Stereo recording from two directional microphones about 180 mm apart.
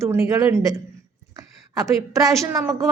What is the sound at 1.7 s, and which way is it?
A woman's voice, 20° right (ahead or behind).